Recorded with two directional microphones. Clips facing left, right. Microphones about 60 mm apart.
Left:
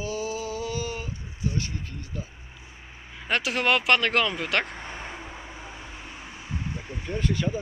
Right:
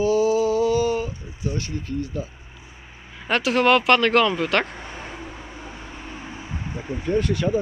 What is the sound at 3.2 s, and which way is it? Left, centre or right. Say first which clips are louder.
Speech: right 6 dB; centre.